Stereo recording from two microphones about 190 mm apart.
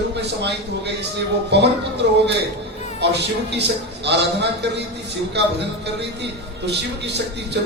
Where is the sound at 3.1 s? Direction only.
65° right (ahead or behind).